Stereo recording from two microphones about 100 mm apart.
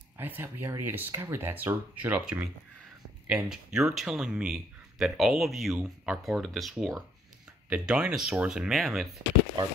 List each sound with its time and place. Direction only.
0.2 s speech: 20° right (ahead or behind); by 9.1 s centre (ahead or behind)